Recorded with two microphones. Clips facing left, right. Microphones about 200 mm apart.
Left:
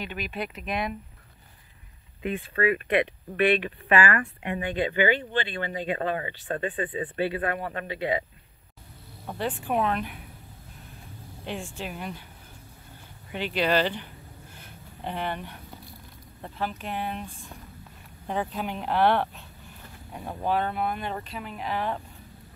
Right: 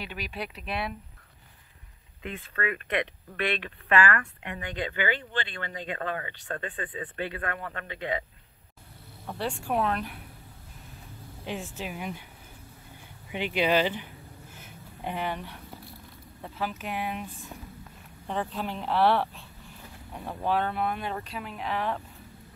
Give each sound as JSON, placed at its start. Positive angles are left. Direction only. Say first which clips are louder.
{"t": 0.0, "sound": "speech", "louder": "left 3 dB", "side_deg": -5}
{"t": 2.2, "sound": "speech", "louder": "left 7 dB", "side_deg": 15}
{"t": 9.4, "sound": "speech", "louder": "left 2 dB", "side_deg": 0}
{"t": 11.4, "sound": "speech", "louder": "left 1 dB", "side_deg": 0}
{"t": 13.3, "sound": "a sound", "louder": "even", "side_deg": -10}
{"t": 16.3, "sound": "speech", "louder": "left 1 dB", "side_deg": 0}
{"t": 18.2, "sound": "speech", "louder": "left 2 dB", "side_deg": 5}